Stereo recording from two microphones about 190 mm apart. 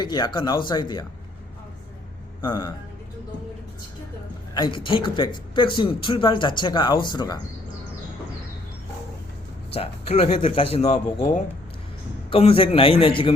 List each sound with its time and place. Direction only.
0.0 s a man's voice: 20° left (ahead or behind)
2.4 s a man's voice: 20° left (ahead or behind)
4.5 s a man's voice: 25° left (ahead or behind)
9.7 s speech: 30° left (ahead or behind)
12.3 s a man's voice: 30° left (ahead or behind)